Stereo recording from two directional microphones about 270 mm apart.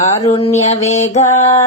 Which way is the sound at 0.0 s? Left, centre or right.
Left.